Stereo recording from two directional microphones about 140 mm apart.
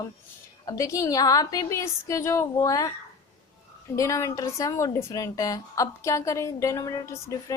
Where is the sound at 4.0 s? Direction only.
20° left (ahead or behind).